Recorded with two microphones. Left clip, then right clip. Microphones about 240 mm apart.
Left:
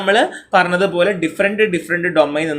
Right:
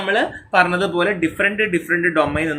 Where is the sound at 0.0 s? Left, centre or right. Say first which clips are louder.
Left 5 dB; left.